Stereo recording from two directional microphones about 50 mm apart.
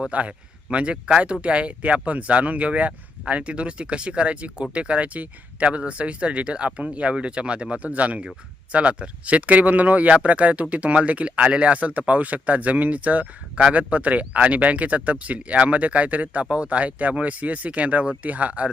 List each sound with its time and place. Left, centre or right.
0.1 s speech: right